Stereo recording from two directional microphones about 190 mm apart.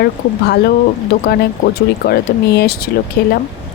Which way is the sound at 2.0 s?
55° left (ahead or behind).